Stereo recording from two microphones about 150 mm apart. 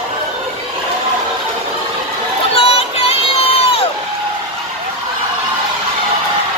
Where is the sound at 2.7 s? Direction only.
40° left (ahead or behind).